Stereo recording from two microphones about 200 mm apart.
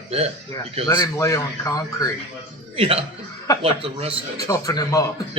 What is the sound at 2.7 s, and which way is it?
A man's voice, 25° right (ahead or behind).